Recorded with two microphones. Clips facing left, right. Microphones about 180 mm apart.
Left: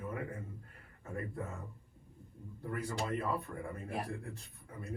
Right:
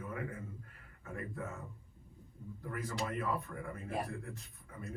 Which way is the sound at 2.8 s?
35° left (ahead or behind).